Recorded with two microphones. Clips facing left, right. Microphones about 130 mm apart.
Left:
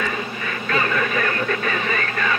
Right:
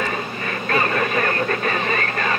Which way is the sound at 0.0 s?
40° right (ahead or behind).